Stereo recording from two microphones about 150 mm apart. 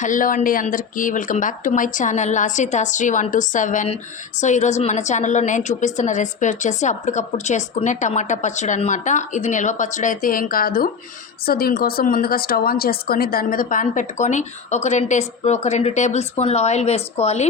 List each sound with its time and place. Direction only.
0.0 s a woman's voice: 60° left (ahead or behind); by 17.4 s 45° left (ahead or behind)